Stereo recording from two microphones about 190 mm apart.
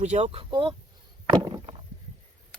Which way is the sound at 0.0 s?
35° right (ahead or behind).